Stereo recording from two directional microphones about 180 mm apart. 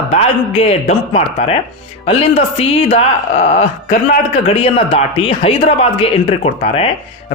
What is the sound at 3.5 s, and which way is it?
Speech, 35° left (ahead or behind).